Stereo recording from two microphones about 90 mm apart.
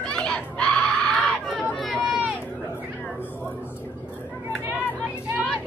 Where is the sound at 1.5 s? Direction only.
Centre (ahead or behind).